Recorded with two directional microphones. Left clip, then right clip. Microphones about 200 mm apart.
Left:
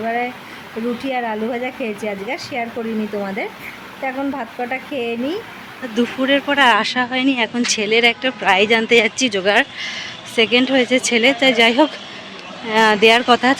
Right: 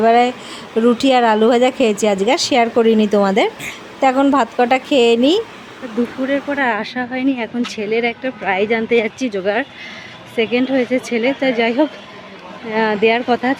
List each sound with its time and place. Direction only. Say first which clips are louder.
0.0 s a woman's voice: right 9 dB; 40° right (ahead or behind)
6.2 s speech: left 5 dB; centre (ahead or behind)